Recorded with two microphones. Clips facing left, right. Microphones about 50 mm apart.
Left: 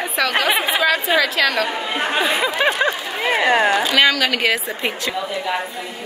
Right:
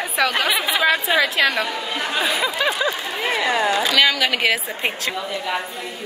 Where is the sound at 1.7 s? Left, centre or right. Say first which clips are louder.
Left 3 dB; left.